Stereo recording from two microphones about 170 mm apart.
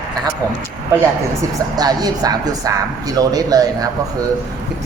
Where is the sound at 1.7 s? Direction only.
25° right (ahead or behind).